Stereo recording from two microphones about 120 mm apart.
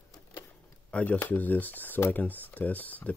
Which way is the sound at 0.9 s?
10° left (ahead or behind).